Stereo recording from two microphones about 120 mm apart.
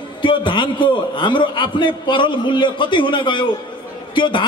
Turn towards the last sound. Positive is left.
turn(degrees=45)  # may be behind; listen again after turning